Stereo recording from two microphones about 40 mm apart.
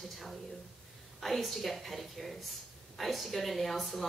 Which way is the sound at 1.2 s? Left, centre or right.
Centre.